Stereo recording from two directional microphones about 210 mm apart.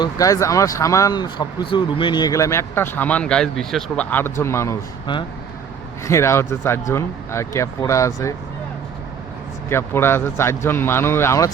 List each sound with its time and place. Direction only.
0.0 s speech: 15° left (ahead or behind)
9.6 s speech: 10° left (ahead or behind)